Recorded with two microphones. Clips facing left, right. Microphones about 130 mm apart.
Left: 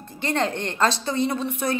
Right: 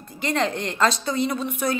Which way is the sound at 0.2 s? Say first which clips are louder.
Even; 30° left (ahead or behind).